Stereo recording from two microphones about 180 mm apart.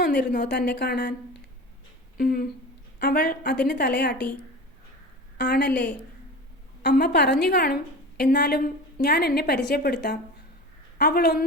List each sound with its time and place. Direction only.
0.2 s a woman's voice: 50° left (ahead or behind)
0.4 s a woman's voice: 70° left (ahead or behind)
2.1 s a woman's voice: 60° left (ahead or behind)
5.4 s a woman's voice: 70° left (ahead or behind)
5.6 s a woman's voice: 10° left (ahead or behind)
6.8 s a woman's voice: 70° left (ahead or behind)